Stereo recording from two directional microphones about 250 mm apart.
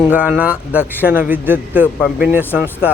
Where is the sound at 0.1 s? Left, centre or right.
Centre.